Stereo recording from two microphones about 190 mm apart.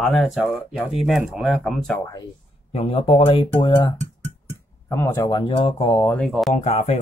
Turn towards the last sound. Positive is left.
turn(degrees=35)  # may be behind; listen again after turning